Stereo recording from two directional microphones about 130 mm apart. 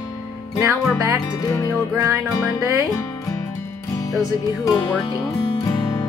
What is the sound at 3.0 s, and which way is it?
Music, 25° left (ahead or behind).